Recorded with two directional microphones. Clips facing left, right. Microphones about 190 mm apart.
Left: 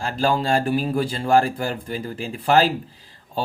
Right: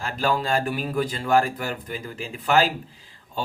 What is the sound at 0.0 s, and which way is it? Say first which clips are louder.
Mantra: left 3 dB; 35° left (ahead or behind).